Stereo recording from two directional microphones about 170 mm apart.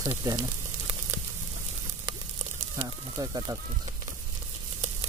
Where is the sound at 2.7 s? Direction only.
20° right (ahead or behind).